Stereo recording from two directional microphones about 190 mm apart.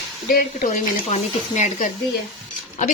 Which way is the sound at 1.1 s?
40° left (ahead or behind).